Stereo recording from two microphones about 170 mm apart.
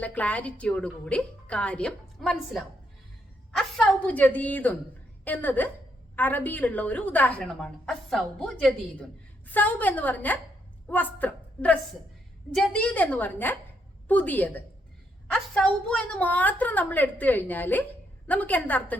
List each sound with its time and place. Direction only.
0.0 s a woman's voice: 10° left (ahead or behind)